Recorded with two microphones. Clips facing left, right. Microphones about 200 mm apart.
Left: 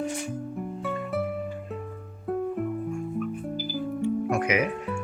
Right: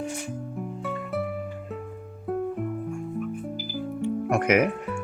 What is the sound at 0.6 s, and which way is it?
Music, centre (ahead or behind).